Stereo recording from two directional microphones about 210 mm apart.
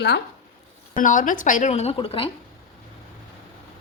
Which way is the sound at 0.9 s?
40° left (ahead or behind).